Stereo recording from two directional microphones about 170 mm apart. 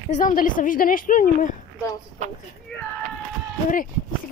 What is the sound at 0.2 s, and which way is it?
A woman's voice, 50° left (ahead or behind).